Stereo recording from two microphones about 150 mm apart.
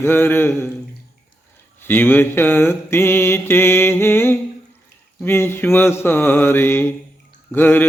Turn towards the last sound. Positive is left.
turn(degrees=15)  # may be behind; listen again after turning